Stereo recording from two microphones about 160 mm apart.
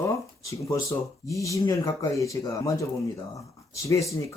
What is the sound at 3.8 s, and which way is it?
Speech, 20° left (ahead or behind).